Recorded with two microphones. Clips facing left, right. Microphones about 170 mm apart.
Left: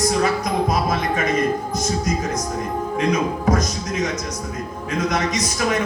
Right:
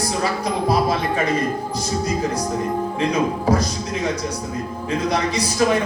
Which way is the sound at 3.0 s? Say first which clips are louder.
Left 1 dB; 30° right (ahead or behind).